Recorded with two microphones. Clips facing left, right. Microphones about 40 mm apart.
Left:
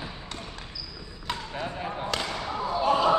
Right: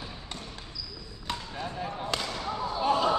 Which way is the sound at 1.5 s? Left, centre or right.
Left.